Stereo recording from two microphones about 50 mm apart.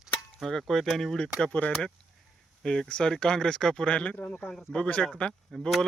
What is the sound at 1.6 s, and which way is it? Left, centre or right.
Speech, left.